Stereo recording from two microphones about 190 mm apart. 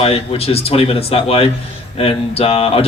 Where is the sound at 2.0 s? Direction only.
30° left (ahead or behind).